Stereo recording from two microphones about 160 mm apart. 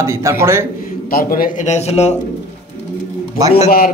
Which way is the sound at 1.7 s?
45° left (ahead or behind).